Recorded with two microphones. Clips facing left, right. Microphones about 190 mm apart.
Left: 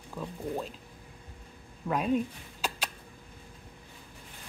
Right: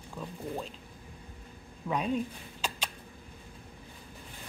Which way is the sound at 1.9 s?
5° left (ahead or behind).